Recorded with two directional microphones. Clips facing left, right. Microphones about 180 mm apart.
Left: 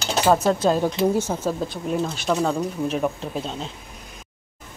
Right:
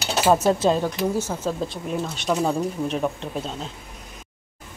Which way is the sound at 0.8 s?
20° left (ahead or behind).